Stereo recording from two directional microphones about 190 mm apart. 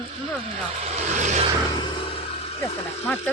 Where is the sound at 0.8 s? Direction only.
35° right (ahead or behind).